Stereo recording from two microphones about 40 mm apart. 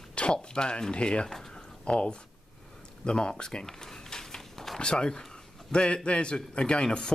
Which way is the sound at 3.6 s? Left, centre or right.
Centre.